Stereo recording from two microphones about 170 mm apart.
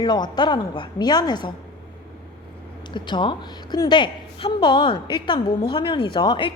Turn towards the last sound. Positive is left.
turn(degrees=30)  # may be behind; listen again after turning